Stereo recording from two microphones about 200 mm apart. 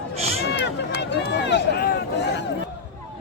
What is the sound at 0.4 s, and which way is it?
Run, 60° left (ahead or behind).